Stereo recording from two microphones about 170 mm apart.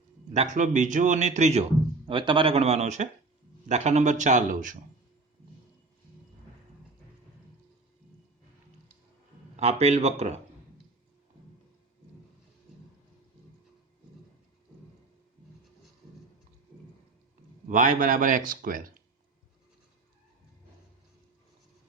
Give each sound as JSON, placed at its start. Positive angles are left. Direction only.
{"t": 0.3, "sound": "speech", "side_deg": -45}
{"t": 2.0, "sound": "speech", "side_deg": -30}
{"t": 9.6, "sound": "speech", "side_deg": -40}
{"t": 17.7, "sound": "speech", "side_deg": -50}